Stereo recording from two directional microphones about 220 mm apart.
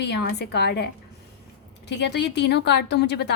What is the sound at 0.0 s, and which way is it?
Speech, 45° left (ahead or behind).